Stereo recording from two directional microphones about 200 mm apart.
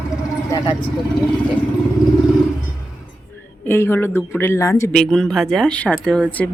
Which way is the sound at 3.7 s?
10° left (ahead or behind).